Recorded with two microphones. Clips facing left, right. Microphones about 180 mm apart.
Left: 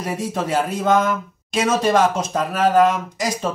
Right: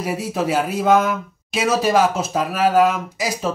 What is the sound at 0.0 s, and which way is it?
Speech, 5° right (ahead or behind).